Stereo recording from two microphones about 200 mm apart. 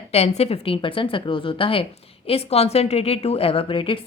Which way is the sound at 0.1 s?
30° left (ahead or behind).